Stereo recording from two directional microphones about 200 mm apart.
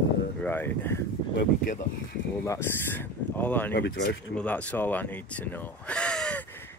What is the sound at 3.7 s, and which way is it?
Speech, 50° left (ahead or behind).